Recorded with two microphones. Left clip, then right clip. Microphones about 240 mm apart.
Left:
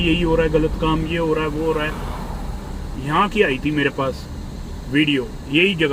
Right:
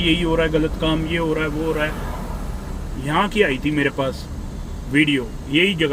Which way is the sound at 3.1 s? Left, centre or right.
Right.